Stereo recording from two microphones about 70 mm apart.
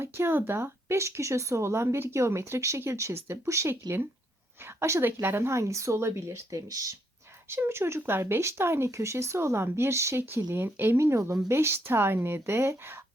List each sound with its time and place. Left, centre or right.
0.0 s speech: right
7.5 s speech: right